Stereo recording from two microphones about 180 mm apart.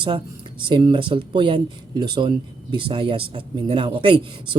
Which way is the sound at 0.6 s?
25° right (ahead or behind).